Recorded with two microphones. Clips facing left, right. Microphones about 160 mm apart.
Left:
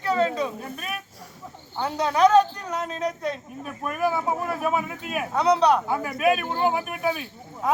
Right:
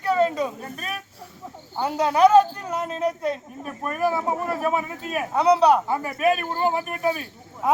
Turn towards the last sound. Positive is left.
turn(degrees=0)  # may be behind; listen again after turning